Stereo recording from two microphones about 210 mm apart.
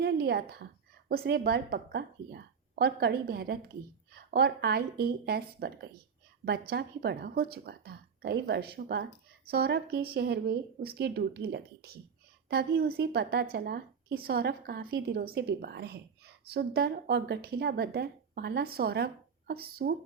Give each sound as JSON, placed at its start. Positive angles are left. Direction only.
{"t": 0.0, "sound": "a woman's voice", "side_deg": -50}